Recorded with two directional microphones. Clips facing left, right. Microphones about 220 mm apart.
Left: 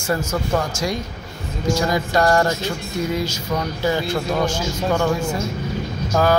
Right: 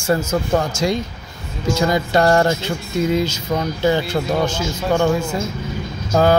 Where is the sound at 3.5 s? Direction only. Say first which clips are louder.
Right 2 dB; 35° right (ahead or behind).